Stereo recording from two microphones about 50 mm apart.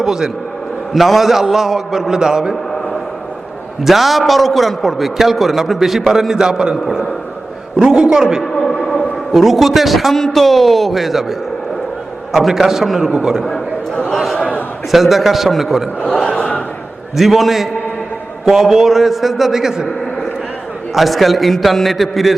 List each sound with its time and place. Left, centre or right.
0.0 s a man's voice: centre
3.8 s a man's voice: centre
7.8 s a man's voice: centre
8.5 s a sound: centre
9.3 s a man's voice: centre
13.1 s a man's voice: centre
14.2 s a sound: centre
14.9 s a man's voice: centre
16.3 s a sound: centre
17.2 s a man's voice: centre
20.9 s a man's voice: centre